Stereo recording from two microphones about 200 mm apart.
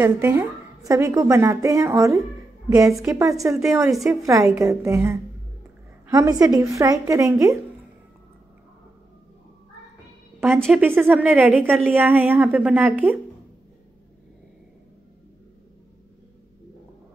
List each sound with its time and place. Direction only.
0.0 s a woman's voice: 10° right (ahead or behind)
2.9 s a woman's voice: centre (ahead or behind)
4.3 s a woman's voice: 15° right (ahead or behind)
10.4 s a woman's voice: 5° right (ahead or behind)